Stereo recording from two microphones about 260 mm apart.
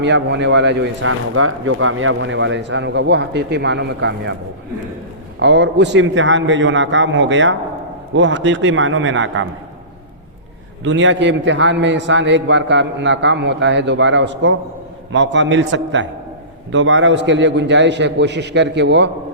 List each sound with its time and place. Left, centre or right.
0.0 s speech: right
5.4 s speech: right
10.8 s speech: right